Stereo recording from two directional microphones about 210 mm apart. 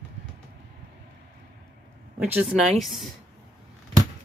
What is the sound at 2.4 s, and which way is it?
Speech, centre (ahead or behind).